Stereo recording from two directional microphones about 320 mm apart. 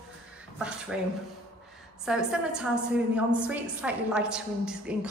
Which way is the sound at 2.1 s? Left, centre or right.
Centre.